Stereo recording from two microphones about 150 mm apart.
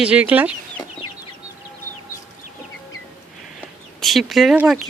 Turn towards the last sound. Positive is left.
turn(degrees=0)  # may be behind; listen again after turning